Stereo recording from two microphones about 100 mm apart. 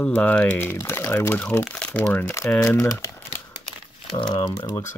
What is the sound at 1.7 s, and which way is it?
Crumpling, 10° left (ahead or behind).